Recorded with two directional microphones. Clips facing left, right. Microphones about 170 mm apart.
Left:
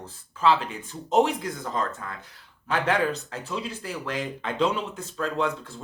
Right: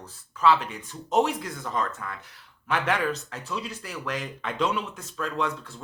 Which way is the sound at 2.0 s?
30° left (ahead or behind).